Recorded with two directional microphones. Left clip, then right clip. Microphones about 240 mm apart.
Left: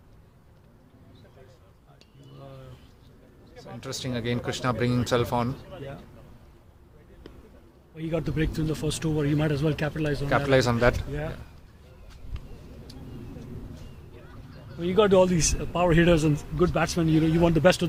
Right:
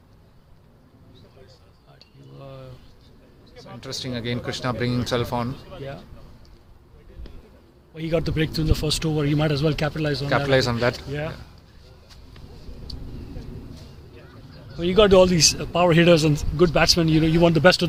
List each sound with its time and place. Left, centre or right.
2.4 s a sound: right
3.8 s speech: centre
5.6 s a man's voice: right
7.9 s a man's voice: right
10.2 s speech: centre
14.8 s a man's voice: right